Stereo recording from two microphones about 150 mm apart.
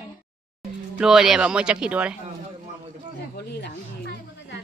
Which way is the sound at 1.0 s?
5° right (ahead or behind).